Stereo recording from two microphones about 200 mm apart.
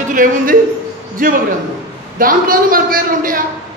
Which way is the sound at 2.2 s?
45° right (ahead or behind).